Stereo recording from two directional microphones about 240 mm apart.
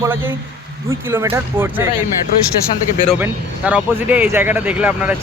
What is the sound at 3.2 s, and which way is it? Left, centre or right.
Speech, centre.